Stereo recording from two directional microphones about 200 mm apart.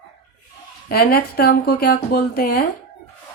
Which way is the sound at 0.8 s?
50° left (ahead or behind).